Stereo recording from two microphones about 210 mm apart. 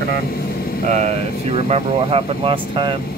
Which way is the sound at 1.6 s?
30° right (ahead or behind).